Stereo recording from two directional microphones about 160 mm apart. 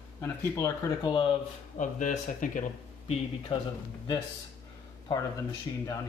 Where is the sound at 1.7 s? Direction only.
50° left (ahead or behind).